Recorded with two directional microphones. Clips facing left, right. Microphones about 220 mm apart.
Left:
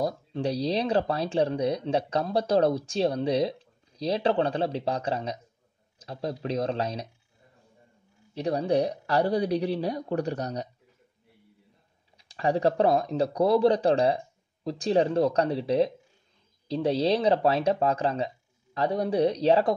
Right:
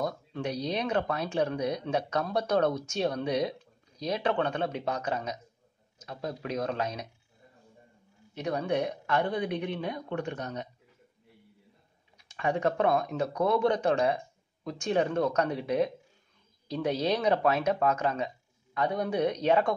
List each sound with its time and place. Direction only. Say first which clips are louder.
0.0 s speech: left 4 dB; 35° left (ahead or behind)
8.4 s speech: left 4 dB; 35° left (ahead or behind)
12.2 s speech: left 4 dB; 35° left (ahead or behind)